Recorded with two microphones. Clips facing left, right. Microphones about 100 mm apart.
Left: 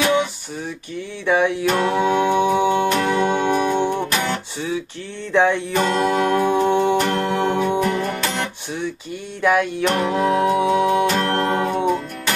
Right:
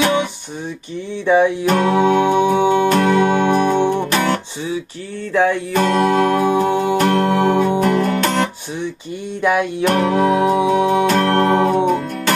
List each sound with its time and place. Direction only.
1.2 s music: 15° right (ahead or behind)
1.7 s music: 50° right (ahead or behind)
2.4 s music: 20° right (ahead or behind)
2.9 s music: 50° right (ahead or behind)
5.3 s music: 5° right (ahead or behind)
5.8 s music: 50° right (ahead or behind)
9.4 s music: 15° right (ahead or behind)
9.8 s music: 55° right (ahead or behind); by 11.8 s 40° right (ahead or behind)